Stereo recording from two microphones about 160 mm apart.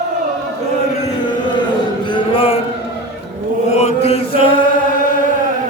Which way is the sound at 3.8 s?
40° left (ahead or behind).